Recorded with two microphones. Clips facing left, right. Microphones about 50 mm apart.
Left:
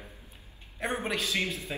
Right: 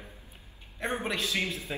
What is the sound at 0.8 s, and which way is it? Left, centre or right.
Speech, centre.